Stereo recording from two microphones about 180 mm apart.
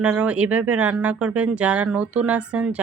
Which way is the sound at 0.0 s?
10° right (ahead or behind).